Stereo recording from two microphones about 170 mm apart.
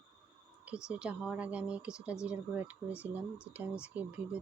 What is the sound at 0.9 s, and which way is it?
Speech, 5° right (ahead or behind).